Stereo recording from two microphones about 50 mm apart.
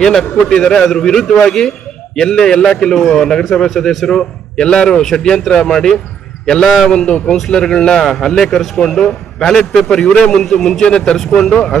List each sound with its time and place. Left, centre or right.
0.3 s speech: centre